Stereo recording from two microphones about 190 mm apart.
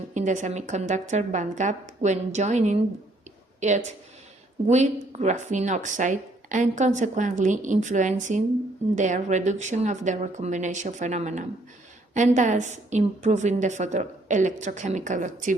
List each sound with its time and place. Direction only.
0.1 s speech: 40° right (ahead or behind)